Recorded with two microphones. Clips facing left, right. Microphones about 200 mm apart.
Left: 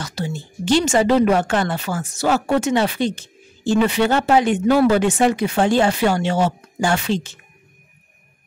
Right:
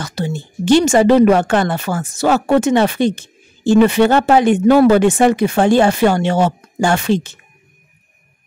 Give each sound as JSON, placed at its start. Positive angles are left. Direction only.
{"t": 0.0, "sound": "speech", "side_deg": -55}